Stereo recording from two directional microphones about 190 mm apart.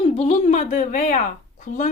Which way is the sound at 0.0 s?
35° left (ahead or behind).